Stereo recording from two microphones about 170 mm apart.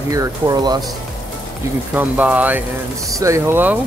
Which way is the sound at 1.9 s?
10° right (ahead or behind).